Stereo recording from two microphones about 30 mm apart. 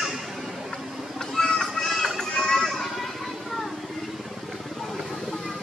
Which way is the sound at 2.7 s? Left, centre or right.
Centre.